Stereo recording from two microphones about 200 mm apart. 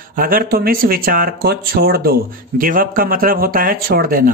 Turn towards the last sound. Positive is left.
turn(degrees=-45)  # may be behind; listen again after turning